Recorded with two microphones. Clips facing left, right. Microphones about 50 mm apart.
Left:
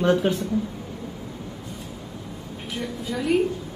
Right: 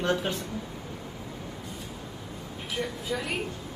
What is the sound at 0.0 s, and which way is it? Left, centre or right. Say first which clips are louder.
Speech: left 7 dB; centre.